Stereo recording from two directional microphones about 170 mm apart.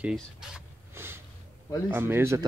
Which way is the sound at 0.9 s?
15° right (ahead or behind).